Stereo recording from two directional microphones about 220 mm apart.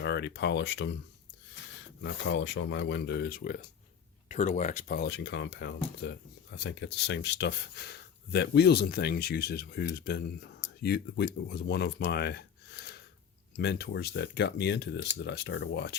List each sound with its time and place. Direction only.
0.0 s speech: 50° left (ahead or behind)
2.0 s speech: 60° left (ahead or behind); by 4.9 s 35° left (ahead or behind)
4.9 s speech: 50° left (ahead or behind)